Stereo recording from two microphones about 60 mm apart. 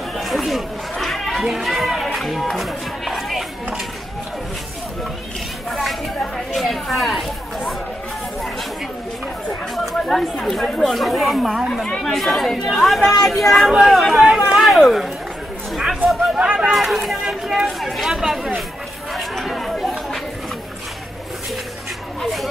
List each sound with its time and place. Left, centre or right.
0.2 s chatter: centre
1.4 s speech: centre
2.1 s music: centre
5.7 s a sound: centre
10.0 s speech: centre
14.2 s chatter: centre
14.6 s a sound: centre
16.3 s speech: centre
16.7 s speech: centre
19.1 s chatter: centre
22.2 s a sound: centre